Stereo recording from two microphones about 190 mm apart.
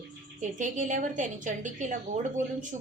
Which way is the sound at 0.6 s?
40° right (ahead or behind).